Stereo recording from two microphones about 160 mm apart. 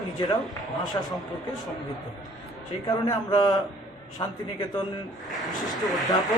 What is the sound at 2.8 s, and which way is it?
A man's voice, 25° left (ahead or behind).